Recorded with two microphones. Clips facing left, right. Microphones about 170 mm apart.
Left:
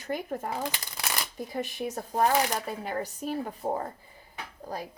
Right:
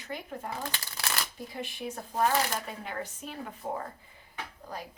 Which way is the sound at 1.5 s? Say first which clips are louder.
Left 5 dB; 40° left (ahead or behind).